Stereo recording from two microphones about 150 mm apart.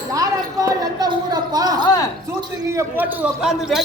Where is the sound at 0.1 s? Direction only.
25° right (ahead or behind).